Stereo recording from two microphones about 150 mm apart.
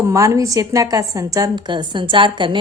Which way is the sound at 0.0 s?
20° right (ahead or behind).